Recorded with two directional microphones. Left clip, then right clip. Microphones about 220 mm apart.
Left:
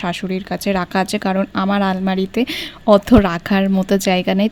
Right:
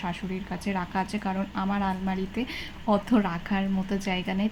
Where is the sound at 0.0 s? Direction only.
50° left (ahead or behind).